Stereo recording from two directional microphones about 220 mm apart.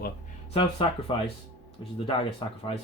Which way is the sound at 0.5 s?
25° left (ahead or behind).